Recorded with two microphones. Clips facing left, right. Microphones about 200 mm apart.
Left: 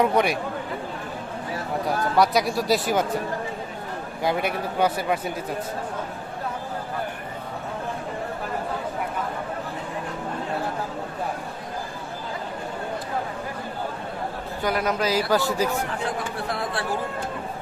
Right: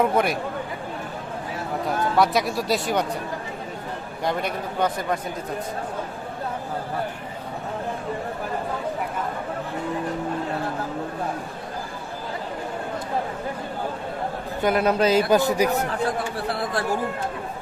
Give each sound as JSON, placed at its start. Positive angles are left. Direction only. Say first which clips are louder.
{"t": 0.0, "sound": "speech", "louder": "even", "side_deg": 0}
{"t": 2.1, "sound": "speech", "louder": "left 1 dB", "side_deg": 0}
{"t": 4.2, "sound": "speech", "louder": "left 2 dB", "side_deg": 5}
{"t": 14.6, "sound": "a man's voice", "louder": "right 4 dB", "side_deg": -25}
{"t": 16.5, "sound": "speech", "louder": "right 2 dB", "side_deg": -35}